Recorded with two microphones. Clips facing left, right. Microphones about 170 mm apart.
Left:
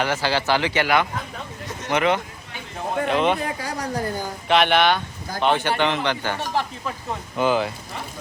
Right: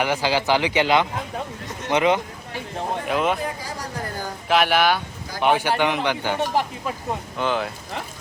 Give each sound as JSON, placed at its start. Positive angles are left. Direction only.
{"t": 0.0, "sound": "a man's voice", "side_deg": -15}
{"t": 3.1, "sound": "speech", "side_deg": 0}
{"t": 4.4, "sound": "a man's voice", "side_deg": -5}
{"t": 7.3, "sound": "speech", "side_deg": 5}